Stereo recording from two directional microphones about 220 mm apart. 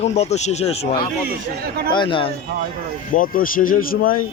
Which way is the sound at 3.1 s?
40° left (ahead or behind).